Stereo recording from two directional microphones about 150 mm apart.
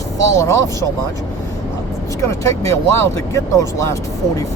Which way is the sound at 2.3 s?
20° left (ahead or behind).